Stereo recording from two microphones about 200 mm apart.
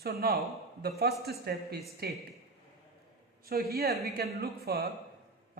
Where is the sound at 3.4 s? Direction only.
50° right (ahead or behind).